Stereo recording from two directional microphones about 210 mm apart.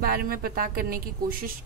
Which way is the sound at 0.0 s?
45° right (ahead or behind).